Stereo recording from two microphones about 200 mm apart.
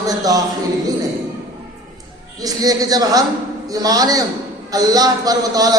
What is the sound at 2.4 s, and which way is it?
A man's voice, 20° right (ahead or behind).